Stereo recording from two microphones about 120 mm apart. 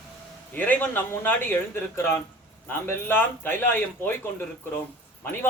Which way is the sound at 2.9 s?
20° left (ahead or behind).